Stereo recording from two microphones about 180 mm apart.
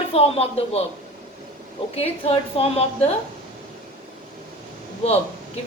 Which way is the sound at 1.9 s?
35° left (ahead or behind).